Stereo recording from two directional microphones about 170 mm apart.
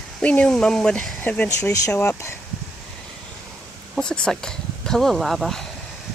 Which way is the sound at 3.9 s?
5° left (ahead or behind).